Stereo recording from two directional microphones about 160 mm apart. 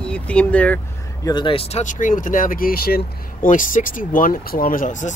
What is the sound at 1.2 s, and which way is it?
Speech, 30° left (ahead or behind).